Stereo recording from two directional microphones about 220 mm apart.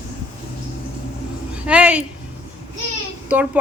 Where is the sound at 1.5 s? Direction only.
5° right (ahead or behind).